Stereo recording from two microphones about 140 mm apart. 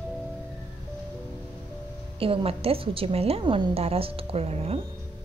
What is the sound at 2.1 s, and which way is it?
A woman's voice, 40° right (ahead or behind).